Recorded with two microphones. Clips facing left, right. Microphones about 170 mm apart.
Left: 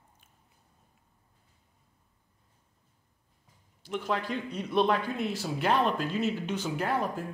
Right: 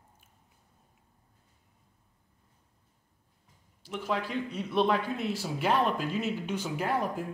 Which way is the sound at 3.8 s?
5° right (ahead or behind).